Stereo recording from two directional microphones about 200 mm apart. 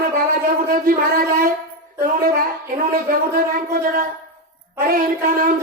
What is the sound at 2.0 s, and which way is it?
A man's voice, 45° right (ahead or behind).